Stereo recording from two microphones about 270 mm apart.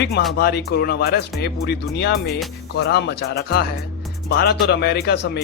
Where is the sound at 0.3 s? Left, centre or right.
Left.